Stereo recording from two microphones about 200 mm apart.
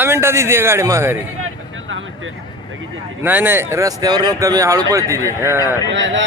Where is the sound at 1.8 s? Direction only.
75° right (ahead or behind).